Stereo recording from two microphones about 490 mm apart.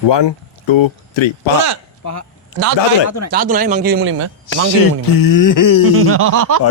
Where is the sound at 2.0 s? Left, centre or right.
Left.